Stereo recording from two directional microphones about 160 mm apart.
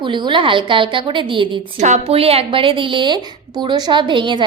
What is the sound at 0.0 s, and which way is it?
A woman's voice, 30° right (ahead or behind).